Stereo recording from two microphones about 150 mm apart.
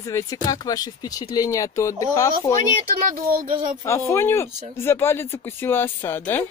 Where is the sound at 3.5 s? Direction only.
35° right (ahead or behind).